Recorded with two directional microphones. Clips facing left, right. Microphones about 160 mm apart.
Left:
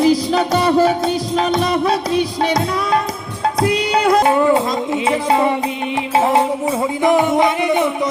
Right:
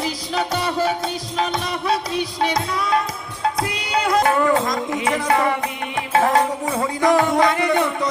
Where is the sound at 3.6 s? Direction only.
30° left (ahead or behind).